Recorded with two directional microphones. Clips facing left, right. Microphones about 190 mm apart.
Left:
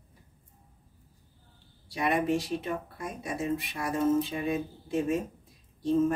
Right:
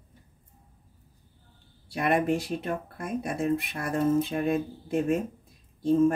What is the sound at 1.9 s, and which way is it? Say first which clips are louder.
Speech: right 2 dB; 55° right (ahead or behind).